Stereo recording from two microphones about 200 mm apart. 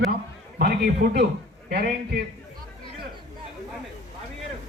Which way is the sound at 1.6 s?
55° right (ahead or behind).